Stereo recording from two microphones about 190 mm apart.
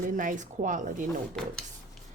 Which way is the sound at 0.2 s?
45° right (ahead or behind).